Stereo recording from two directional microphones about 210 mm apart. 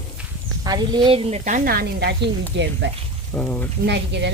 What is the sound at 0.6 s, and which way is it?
Speech, 20° right (ahead or behind).